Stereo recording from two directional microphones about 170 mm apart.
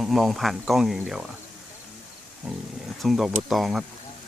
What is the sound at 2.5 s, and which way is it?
Speech, 5° right (ahead or behind).